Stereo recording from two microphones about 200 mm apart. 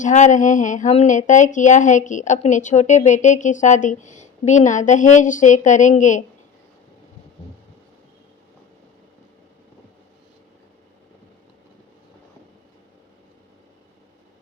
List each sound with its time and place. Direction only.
0.0 s speech: 40° left (ahead or behind)